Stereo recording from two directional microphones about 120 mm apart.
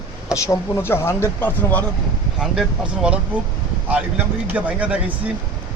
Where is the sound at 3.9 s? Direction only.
10° right (ahead or behind).